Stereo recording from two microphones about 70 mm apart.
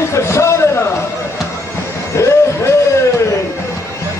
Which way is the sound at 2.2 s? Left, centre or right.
Left.